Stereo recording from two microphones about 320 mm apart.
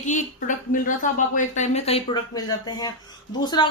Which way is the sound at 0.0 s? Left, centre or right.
Left.